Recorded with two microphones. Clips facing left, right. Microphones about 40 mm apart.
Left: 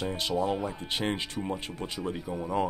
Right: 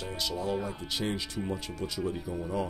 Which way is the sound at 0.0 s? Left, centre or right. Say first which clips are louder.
Left 5 dB; left.